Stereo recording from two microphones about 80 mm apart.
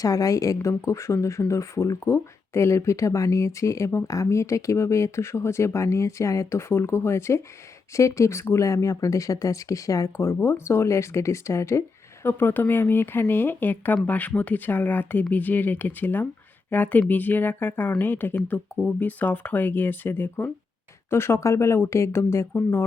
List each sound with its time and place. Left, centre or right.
0.0 s speech: left
12.2 s speech: left